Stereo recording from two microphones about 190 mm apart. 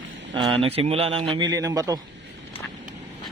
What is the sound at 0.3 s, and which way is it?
Speech, 30° right (ahead or behind).